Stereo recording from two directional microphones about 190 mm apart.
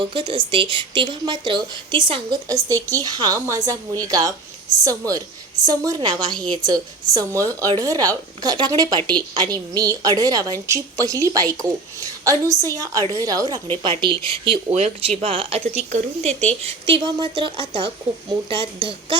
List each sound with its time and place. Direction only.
0.0 s a woman's voice: 25° right (ahead or behind)
14.8 s speech: 35° right (ahead or behind)